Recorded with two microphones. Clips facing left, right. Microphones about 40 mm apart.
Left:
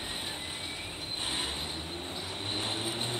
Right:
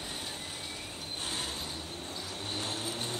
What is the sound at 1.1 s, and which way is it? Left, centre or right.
Vehicle, left.